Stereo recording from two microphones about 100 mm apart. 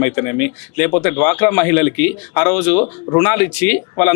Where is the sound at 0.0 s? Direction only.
25° left (ahead or behind).